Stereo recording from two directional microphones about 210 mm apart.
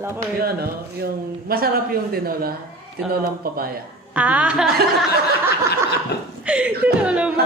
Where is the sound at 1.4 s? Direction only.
45° right (ahead or behind).